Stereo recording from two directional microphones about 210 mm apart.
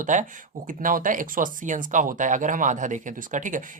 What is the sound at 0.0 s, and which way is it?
Speech, 35° right (ahead or behind).